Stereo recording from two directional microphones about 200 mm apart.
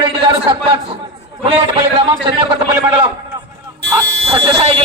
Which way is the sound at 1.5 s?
25° right (ahead or behind).